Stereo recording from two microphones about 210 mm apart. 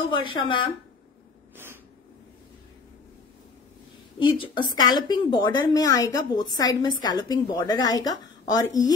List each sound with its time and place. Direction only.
0.1 s a woman's voice: 25° left (ahead or behind)
4.2 s a woman's voice: 25° left (ahead or behind)